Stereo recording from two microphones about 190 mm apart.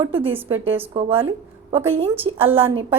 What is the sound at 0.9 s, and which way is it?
A woman's voice, 30° right (ahead or behind).